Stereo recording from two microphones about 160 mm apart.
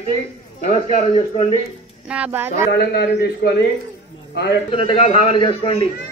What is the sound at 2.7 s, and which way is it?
Speech, 90° left.